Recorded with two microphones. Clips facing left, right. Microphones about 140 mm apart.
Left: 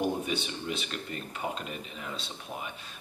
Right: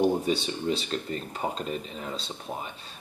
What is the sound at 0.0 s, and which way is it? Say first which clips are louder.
Speech: right 6 dB; 30° right (ahead or behind).